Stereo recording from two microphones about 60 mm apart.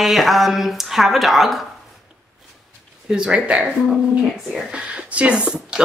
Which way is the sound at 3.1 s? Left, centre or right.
Centre.